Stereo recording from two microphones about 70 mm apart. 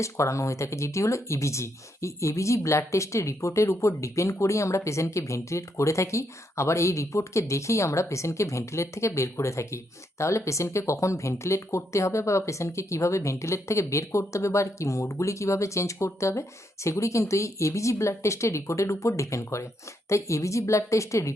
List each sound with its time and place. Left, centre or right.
0.0 s speech: left